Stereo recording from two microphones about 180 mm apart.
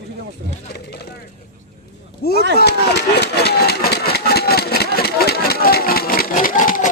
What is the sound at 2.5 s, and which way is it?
Engine, 65° left (ahead or behind).